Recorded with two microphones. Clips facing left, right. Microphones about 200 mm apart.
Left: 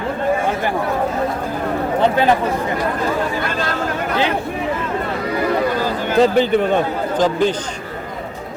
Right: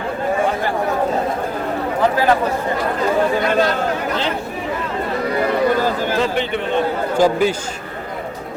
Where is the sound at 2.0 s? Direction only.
25° left (ahead or behind).